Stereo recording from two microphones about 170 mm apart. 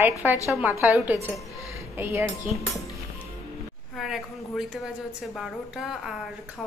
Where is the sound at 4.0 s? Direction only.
Centre (ahead or behind).